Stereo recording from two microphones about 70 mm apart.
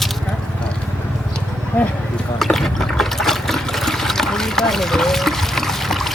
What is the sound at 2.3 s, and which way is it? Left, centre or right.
Water, centre.